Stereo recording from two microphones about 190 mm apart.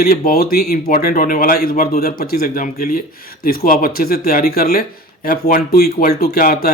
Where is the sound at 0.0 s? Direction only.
50° left (ahead or behind).